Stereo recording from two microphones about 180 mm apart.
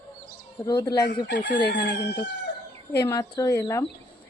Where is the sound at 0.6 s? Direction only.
20° left (ahead or behind).